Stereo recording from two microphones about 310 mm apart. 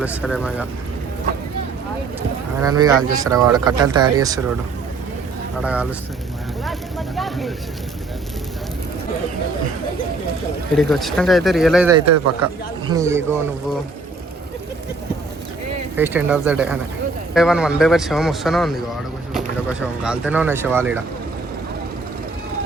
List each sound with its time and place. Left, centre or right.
0.0 s a man's voice: centre
2.6 s speech: centre
5.6 s a man's voice: centre
7.2 s a sound: centre
10.8 s a man's voice: centre
11.9 s a man's voice: right
12.9 s speech: centre
16.0 s a man's voice: centre
20.1 s a man's voice: centre